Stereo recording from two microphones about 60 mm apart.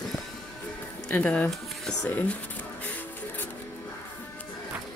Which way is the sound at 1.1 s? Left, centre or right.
Left.